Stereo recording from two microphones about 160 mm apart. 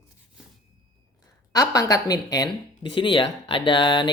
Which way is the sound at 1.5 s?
20° left (ahead or behind).